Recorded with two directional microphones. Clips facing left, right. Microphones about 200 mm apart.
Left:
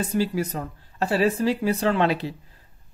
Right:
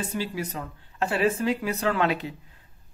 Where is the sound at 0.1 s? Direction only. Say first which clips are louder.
Left 6 dB; 45° left (ahead or behind).